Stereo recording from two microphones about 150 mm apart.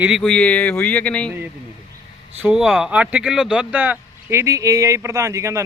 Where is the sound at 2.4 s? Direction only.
5° right (ahead or behind).